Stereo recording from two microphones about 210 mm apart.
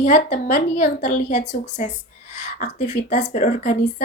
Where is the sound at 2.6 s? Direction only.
35° left (ahead or behind).